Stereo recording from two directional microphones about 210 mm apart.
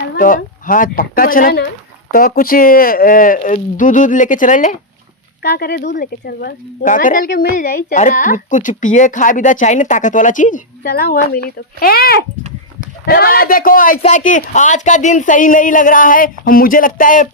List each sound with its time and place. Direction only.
0.2 s speech: 40° left (ahead or behind)
5.4 s speech: 50° left (ahead or behind)